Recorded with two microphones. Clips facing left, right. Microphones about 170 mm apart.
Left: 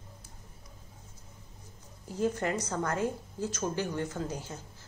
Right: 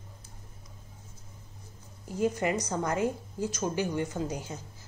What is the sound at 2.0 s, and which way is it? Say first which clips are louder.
A woman's voice: right 2 dB; 15° right (ahead or behind).